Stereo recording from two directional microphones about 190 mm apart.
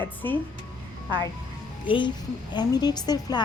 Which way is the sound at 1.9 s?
25° left (ahead or behind).